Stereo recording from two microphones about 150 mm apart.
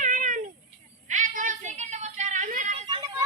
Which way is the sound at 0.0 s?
60° right (ahead or behind).